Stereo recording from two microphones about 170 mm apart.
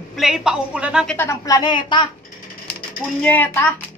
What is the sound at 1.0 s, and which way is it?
A woman's voice, 15° left (ahead or behind).